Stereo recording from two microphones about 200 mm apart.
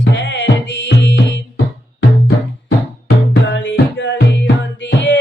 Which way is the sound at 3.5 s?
65° left (ahead or behind).